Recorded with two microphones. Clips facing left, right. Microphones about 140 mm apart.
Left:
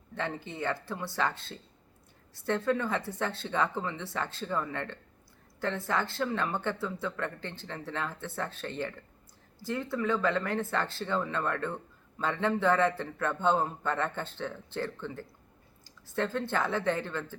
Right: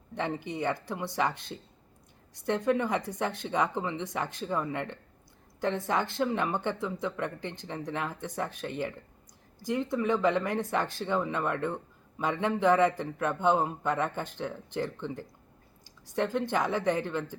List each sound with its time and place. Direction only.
0.1 s speech: 15° right (ahead or behind)